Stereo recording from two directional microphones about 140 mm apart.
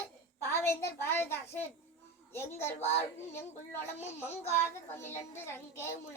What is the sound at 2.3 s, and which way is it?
A child's voice, 20° left (ahead or behind).